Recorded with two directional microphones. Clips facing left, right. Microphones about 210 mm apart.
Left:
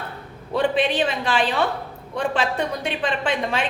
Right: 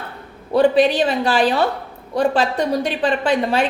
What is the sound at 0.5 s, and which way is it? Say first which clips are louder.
A woman's voice: right 7 dB; 40° right (ahead or behind).